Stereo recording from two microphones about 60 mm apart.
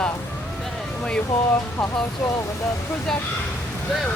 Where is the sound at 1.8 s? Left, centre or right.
Left.